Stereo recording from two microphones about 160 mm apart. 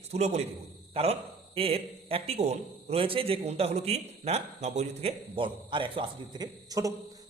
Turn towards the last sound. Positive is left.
turn(degrees=-20)  # may be behind; listen again after turning